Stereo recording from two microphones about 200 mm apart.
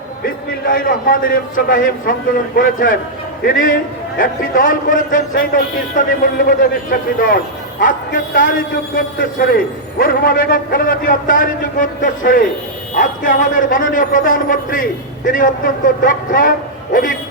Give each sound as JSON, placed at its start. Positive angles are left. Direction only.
{"t": 0.6, "sound": "a man's voice", "side_deg": 45}